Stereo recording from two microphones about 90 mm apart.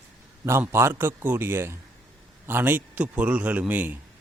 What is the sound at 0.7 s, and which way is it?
A man's voice, 30° right (ahead or behind).